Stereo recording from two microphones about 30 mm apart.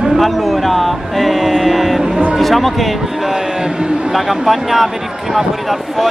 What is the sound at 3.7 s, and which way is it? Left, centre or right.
Speech, right.